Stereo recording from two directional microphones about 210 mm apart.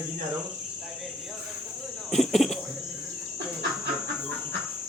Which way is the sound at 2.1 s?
Centre (ahead or behind).